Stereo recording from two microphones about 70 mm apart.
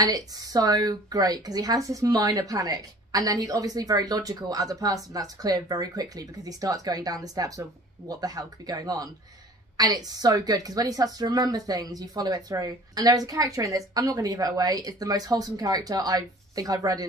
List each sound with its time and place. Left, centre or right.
0.0 s speech: right